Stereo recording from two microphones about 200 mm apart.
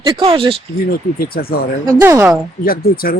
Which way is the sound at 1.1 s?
50° left (ahead or behind).